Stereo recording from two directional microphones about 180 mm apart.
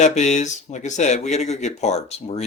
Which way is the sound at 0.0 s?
40° left (ahead or behind).